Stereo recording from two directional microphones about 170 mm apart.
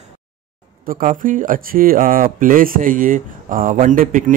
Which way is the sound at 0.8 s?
50° right (ahead or behind).